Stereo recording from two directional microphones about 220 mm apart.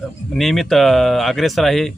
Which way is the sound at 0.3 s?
Centre (ahead or behind).